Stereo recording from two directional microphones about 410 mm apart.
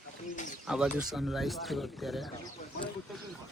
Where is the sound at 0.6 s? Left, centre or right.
Centre.